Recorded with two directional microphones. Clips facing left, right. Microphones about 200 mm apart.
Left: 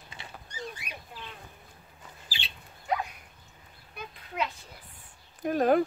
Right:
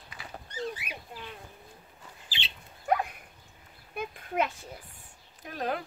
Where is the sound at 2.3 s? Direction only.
20° right (ahead or behind).